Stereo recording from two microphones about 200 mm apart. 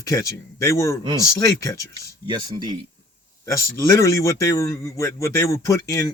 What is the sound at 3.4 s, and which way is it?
A man's voice, 15° left (ahead or behind).